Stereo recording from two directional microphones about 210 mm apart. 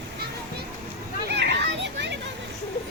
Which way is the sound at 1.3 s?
50° right (ahead or behind).